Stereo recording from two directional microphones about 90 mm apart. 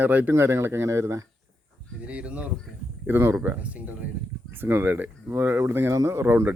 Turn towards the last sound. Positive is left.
turn(degrees=-25)  # may be behind; listen again after turning